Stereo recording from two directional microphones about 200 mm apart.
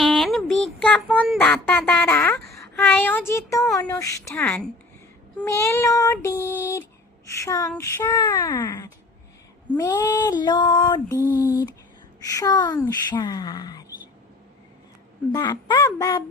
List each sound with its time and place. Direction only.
0.0 s a sound: centre (ahead or behind)
1.1 s child singing: 5° left (ahead or behind)
2.5 s speech: 10° left (ahead or behind)
3.8 s child singing: 15° left (ahead or behind)
9.7 s female singing: 15° left (ahead or behind)
11.2 s speech: 10° right (ahead or behind)
12.2 s female singing: 15° left (ahead or behind)
15.3 s child singing: 20° left (ahead or behind)